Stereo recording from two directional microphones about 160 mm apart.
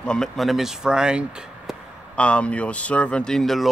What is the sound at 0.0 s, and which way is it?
Speech, 5° left (ahead or behind).